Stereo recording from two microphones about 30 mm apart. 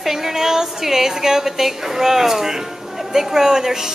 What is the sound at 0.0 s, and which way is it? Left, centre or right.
A woman's voice, centre.